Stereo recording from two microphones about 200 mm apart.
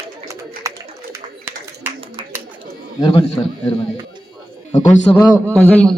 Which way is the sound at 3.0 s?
25° left (ahead or behind).